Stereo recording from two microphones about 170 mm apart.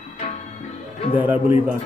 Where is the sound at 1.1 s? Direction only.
10° right (ahead or behind).